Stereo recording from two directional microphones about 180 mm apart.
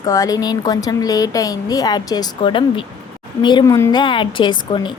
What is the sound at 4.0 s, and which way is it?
Speech, 25° left (ahead or behind).